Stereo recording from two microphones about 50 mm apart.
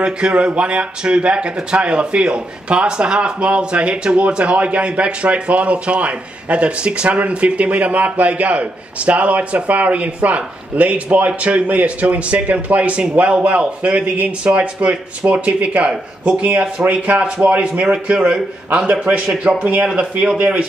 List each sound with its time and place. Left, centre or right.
0.0 s speech: right
17.9 s a man's voice: right